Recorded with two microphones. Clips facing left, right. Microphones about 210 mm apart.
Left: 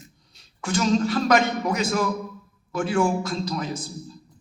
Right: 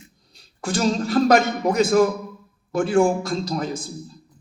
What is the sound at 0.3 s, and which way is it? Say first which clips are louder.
A man's voice: right 1 dB; 35° right (ahead or behind).